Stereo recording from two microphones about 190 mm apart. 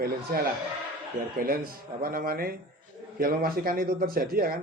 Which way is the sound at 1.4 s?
50° right (ahead or behind).